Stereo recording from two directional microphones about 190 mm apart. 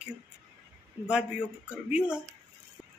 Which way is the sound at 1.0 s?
5° right (ahead or behind).